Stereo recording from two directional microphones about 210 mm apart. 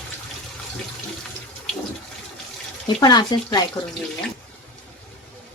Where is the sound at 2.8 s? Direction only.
20° left (ahead or behind).